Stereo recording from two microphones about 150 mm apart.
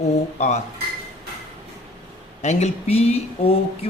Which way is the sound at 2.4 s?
50° left (ahead or behind).